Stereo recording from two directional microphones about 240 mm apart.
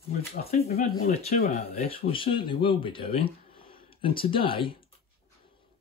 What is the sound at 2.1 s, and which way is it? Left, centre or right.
Speech, left.